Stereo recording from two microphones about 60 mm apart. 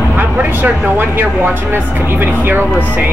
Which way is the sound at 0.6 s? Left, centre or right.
Right.